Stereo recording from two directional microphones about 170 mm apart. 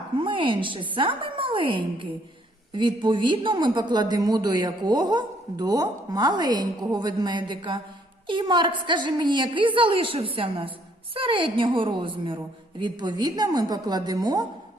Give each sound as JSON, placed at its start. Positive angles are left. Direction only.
{"t": 0.2, "sound": "a woman's voice", "side_deg": -30}